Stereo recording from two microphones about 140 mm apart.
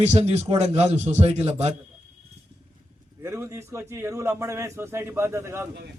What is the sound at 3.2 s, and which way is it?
A man's voice, 20° right (ahead or behind).